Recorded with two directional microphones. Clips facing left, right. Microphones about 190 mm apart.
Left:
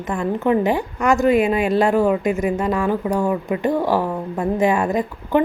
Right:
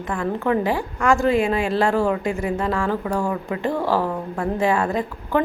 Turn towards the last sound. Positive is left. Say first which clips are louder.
# left 3 dB
turn(degrees=20)  # may be behind; listen again after turning